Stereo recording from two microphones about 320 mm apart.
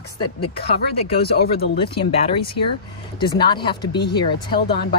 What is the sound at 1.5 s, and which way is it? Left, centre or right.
Speech, centre.